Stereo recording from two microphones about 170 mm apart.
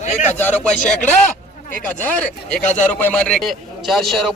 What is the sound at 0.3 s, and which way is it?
Speech, 10° left (ahead or behind).